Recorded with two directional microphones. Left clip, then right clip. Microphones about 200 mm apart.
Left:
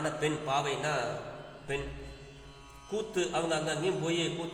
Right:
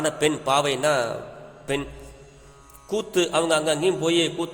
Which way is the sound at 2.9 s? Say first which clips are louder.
Right 9 dB; 55° right (ahead or behind).